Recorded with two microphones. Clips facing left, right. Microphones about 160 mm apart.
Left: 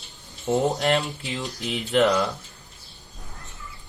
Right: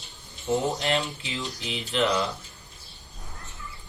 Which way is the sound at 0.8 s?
40° left (ahead or behind).